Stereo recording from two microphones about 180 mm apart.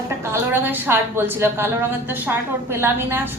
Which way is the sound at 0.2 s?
15° right (ahead or behind).